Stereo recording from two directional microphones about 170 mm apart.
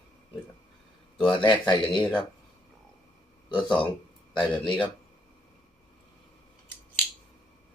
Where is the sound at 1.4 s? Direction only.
30° left (ahead or behind).